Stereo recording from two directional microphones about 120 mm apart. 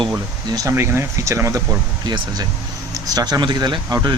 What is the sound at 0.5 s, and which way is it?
Speech, 25° right (ahead or behind).